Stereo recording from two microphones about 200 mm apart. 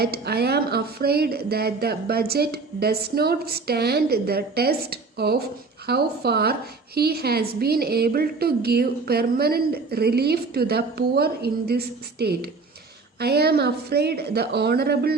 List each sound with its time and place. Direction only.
0.0 s a woman's voice: 50° right (ahead or behind)